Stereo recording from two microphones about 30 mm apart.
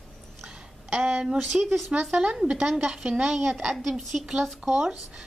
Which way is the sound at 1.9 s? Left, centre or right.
Right.